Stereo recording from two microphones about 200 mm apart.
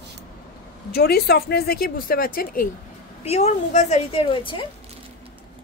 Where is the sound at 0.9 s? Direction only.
50° left (ahead or behind).